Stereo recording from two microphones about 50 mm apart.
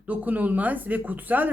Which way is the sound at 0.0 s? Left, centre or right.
Right.